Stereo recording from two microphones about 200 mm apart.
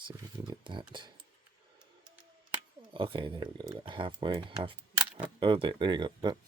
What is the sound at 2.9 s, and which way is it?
Speech, 25° right (ahead or behind).